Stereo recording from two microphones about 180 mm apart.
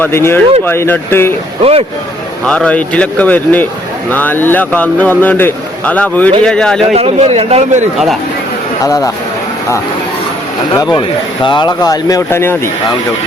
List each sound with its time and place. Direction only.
0.0 s speech: 15° left (ahead or behind)
2.5 s speech: 5° left (ahead or behind)
6.8 s a man's voice: 35° right (ahead or behind)
8.8 s speech: 20° left (ahead or behind)
10.8 s speech: 20° left (ahead or behind)